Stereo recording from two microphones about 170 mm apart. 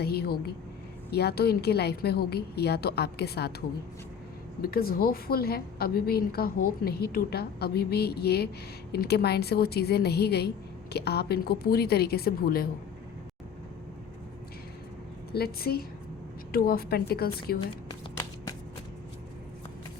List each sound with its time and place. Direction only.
0.0 s a sound: 70° left (ahead or behind)
1.1 s a woman's voice: 70° left (ahead or behind)
4.6 s a woman's voice: 60° left (ahead or behind)
15.3 s a woman's voice: 65° left (ahead or behind)